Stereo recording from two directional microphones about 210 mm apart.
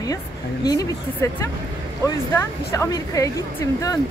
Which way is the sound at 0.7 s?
15° left (ahead or behind).